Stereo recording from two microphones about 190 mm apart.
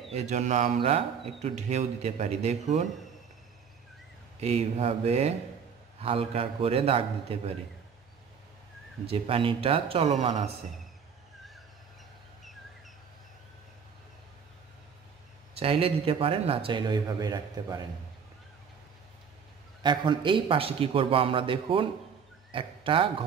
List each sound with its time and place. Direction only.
0.1 s speech: 35° right (ahead or behind)
4.4 s speech: 35° right (ahead or behind)
9.0 s speech: 30° right (ahead or behind)
15.5 s speech: 30° right (ahead or behind)
19.8 s speech: 25° right (ahead or behind)